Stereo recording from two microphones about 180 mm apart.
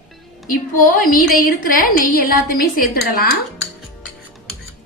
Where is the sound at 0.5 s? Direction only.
50° left (ahead or behind).